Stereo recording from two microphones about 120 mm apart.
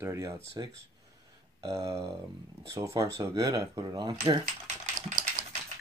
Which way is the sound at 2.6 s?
25° right (ahead or behind).